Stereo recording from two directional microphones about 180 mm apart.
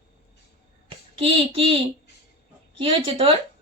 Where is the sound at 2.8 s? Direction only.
30° right (ahead or behind).